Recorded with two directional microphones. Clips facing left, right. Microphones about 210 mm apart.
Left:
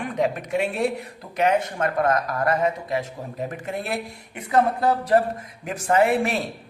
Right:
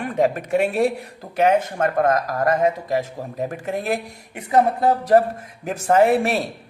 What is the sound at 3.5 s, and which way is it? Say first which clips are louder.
A woman's voice: right 6 dB; 45° right (ahead or behind).